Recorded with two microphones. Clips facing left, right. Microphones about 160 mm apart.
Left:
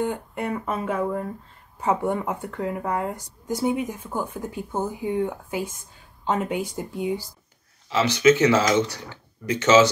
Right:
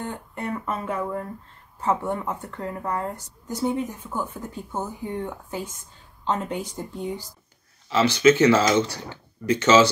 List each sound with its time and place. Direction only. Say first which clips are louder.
0.0 s speech: left 5 dB; 10° left (ahead or behind)